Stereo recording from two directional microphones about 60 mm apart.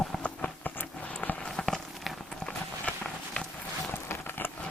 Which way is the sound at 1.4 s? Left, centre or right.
Centre.